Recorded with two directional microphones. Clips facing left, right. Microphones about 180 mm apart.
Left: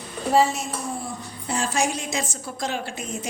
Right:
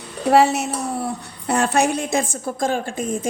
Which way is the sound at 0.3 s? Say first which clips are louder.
Right 5 dB; 70° right (ahead or behind).